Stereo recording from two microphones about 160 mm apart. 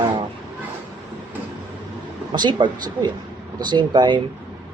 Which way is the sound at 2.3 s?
25° right (ahead or behind).